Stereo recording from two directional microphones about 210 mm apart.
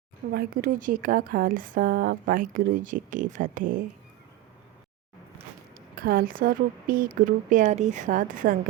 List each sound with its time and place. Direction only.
0.3 s speech: 45° right (ahead or behind)
6.0 s speech: 45° right (ahead or behind)